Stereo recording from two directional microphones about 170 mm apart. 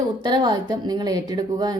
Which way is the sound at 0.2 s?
25° right (ahead or behind).